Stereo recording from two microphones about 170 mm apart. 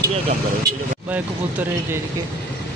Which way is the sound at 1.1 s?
10° right (ahead or behind).